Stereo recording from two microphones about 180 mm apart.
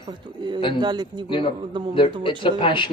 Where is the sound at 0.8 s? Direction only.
25° right (ahead or behind).